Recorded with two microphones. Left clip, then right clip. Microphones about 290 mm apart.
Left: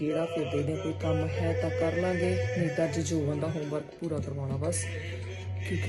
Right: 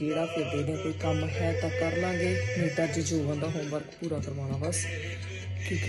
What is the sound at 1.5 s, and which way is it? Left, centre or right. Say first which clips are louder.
Speech: even; centre.